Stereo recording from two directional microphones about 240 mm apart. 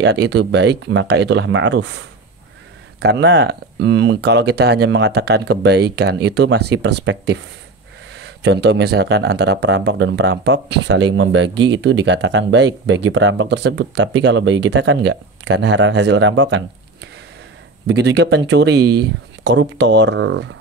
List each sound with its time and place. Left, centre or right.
0.0 s speech: right